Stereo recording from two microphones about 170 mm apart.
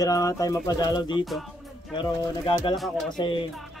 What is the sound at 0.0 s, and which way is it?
Speech, 20° left (ahead or behind).